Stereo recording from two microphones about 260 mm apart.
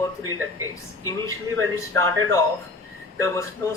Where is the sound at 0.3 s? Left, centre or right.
Right.